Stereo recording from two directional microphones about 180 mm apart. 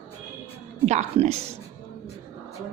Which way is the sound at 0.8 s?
40° right (ahead or behind).